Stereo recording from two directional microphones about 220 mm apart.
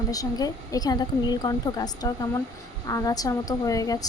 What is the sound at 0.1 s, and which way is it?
A woman's voice, 15° left (ahead or behind).